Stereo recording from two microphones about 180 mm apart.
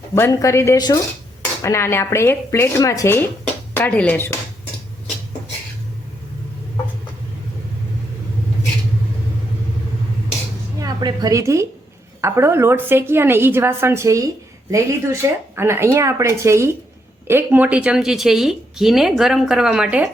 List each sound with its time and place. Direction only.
0.1 s speech: 15° left (ahead or behind)
10.8 s a woman's voice: 20° right (ahead or behind); by 20.1 s 5° right (ahead or behind)